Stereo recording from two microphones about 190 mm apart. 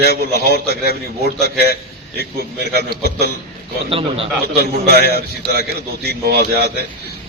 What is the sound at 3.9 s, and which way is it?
Speech, 30° right (ahead or behind).